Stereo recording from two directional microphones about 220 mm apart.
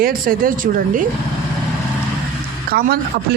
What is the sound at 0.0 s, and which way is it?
Speech, 40° right (ahead or behind).